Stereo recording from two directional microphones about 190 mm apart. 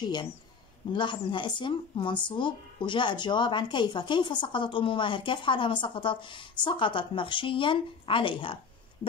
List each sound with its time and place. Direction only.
0.9 s speech: 25° left (ahead or behind)